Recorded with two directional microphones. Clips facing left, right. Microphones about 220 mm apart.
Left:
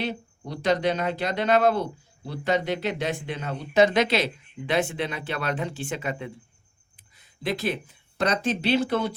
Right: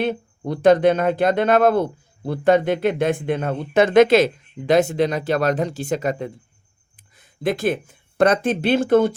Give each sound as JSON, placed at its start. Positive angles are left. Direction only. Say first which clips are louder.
{"t": 0.0, "sound": "speech", "louder": "right 8 dB", "side_deg": -55}